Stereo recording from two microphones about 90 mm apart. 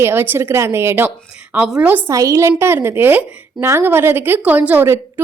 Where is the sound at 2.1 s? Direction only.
35° right (ahead or behind); by 4.8 s 15° right (ahead or behind).